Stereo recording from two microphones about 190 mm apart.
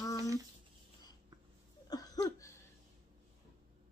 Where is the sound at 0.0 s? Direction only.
15° left (ahead or behind).